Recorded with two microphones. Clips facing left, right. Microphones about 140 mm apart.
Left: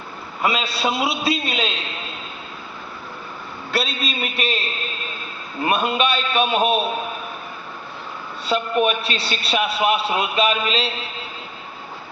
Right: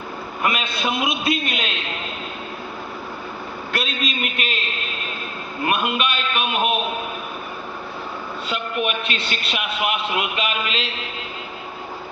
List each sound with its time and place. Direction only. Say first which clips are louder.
0.4 s a man's voice: left 2 dB; 35° left (ahead or behind)
3.8 s a man's voice: left 2 dB; 35° left (ahead or behind)
5.6 s a man's voice: left 2 dB; 35° left (ahead or behind)
8.4 s a man's voice: left 6 dB; 35° left (ahead or behind)